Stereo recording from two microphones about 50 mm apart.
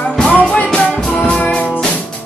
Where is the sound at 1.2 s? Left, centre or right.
Left.